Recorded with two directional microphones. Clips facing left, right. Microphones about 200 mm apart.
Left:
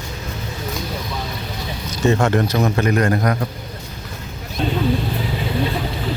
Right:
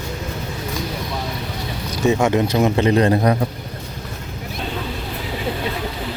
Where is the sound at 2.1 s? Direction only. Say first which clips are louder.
Even; 10° right (ahead or behind); by 3.2 s 25° right (ahead or behind).